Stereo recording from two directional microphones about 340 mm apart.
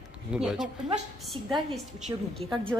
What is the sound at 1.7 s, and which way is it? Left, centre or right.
Speech, centre.